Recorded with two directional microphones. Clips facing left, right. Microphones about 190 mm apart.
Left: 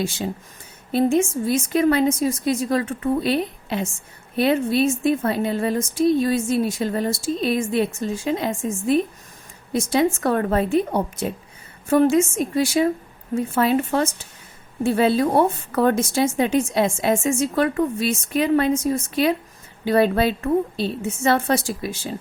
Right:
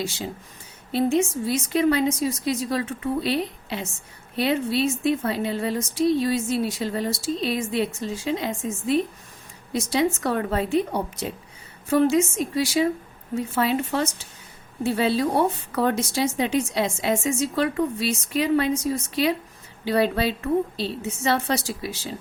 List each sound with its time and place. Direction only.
0.9 s a woman's voice: 50° left (ahead or behind)